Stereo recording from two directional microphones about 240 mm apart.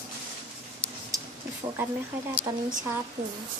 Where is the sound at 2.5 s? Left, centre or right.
Centre.